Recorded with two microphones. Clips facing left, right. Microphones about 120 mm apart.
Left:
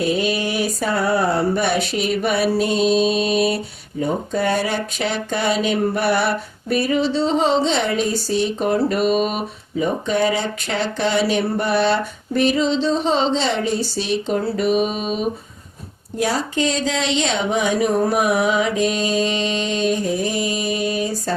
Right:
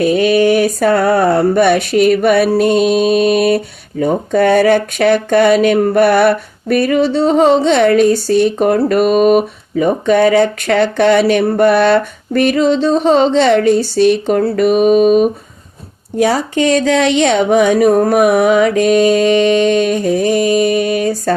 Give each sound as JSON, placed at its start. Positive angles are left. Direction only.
{"t": 0.0, "sound": "speech", "side_deg": -60}